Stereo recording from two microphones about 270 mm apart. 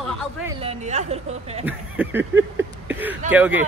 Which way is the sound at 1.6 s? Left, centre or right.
Centre.